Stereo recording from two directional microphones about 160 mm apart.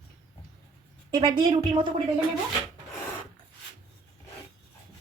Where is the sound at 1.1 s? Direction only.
30° right (ahead or behind).